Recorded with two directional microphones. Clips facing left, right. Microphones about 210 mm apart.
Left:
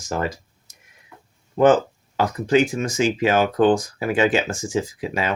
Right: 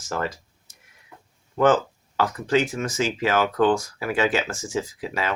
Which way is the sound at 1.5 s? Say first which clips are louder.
Left 4 dB; 15° left (ahead or behind).